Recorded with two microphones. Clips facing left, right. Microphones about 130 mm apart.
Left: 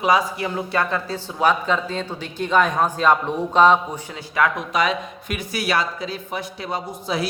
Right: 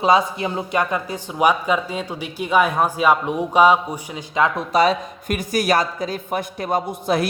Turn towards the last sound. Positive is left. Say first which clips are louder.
# right 4 dB
turn(degrees=-55)  # may be behind; listen again after turning